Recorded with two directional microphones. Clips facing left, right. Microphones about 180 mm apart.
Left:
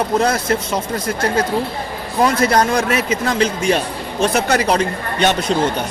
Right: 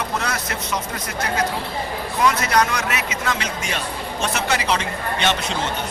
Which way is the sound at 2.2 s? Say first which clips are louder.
Left 4 dB; 35° left (ahead or behind).